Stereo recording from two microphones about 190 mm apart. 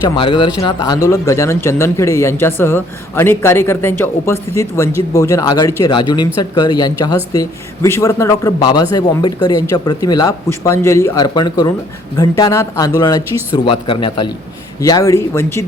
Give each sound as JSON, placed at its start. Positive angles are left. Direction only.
{"t": 0.2, "sound": "speech", "side_deg": 25}